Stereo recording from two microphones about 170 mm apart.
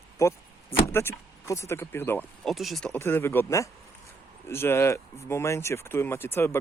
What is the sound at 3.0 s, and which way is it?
Speech, 15° left (ahead or behind).